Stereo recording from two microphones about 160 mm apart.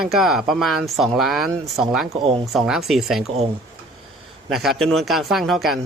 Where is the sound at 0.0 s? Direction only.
Centre (ahead or behind).